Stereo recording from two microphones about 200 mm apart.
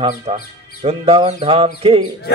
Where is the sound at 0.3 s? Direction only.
30° right (ahead or behind).